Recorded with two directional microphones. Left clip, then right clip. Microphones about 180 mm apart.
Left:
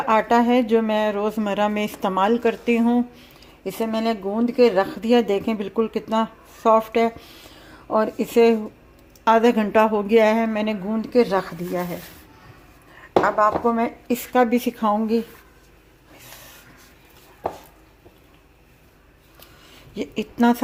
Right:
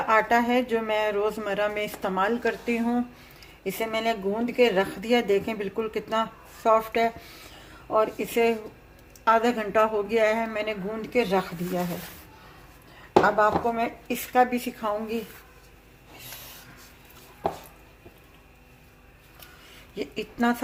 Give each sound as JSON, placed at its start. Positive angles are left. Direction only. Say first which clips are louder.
{"t": 0.1, "sound": "a woman's voice", "louder": "left 4 dB", "side_deg": 30}
{"t": 13.2, "sound": "speech", "louder": "left 6 dB", "side_deg": 25}
{"t": 20.0, "sound": "speech", "louder": "left 6 dB", "side_deg": 40}